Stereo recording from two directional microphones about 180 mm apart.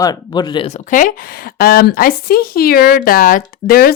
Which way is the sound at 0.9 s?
50° left (ahead or behind).